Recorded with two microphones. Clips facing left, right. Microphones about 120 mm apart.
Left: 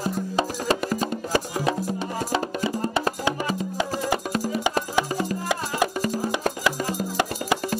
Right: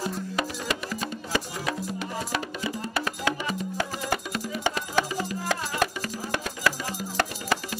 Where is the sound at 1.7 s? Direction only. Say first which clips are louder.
Left 5 dB; 30° left (ahead or behind).